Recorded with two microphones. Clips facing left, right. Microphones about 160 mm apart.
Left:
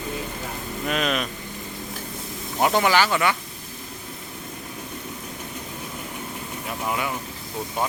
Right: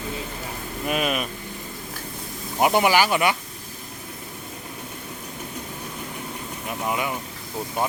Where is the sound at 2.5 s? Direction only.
15° right (ahead or behind).